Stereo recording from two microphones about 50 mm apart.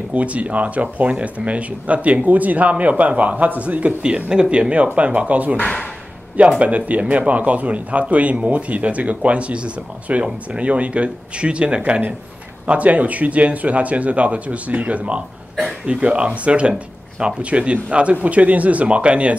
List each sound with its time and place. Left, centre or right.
0.1 s speech: right
5.6 s speech: left
6.6 s speech: right